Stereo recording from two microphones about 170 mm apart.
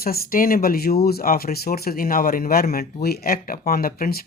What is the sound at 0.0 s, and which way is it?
Speech, 60° left (ahead or behind).